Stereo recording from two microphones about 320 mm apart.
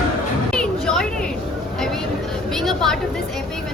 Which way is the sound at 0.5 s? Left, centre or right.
Centre.